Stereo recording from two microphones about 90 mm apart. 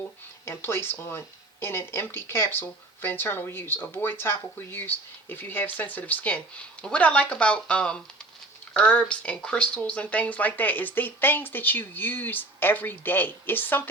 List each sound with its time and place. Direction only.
0.4 s speech: 25° left (ahead or behind)